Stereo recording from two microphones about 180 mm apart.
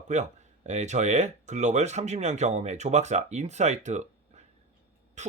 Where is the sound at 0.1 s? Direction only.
40° right (ahead or behind).